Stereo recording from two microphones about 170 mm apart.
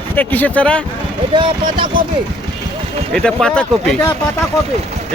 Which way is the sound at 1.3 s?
30° right (ahead or behind).